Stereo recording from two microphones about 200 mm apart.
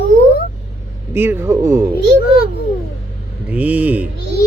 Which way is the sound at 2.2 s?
50° left (ahead or behind).